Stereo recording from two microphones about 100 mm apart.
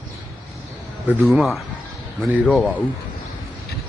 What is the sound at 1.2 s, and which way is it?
Speech, centre (ahead or behind).